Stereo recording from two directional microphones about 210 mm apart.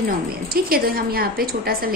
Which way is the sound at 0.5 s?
45° right (ahead or behind).